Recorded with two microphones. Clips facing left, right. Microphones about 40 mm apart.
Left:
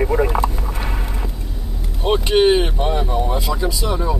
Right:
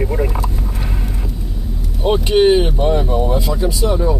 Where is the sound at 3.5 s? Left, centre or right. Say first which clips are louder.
Right 3 dB; centre.